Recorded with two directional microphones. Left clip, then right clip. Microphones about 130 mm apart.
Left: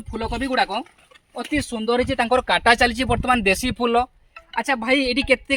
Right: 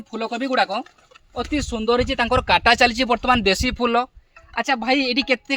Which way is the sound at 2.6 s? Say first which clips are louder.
Even; 30° right (ahead or behind).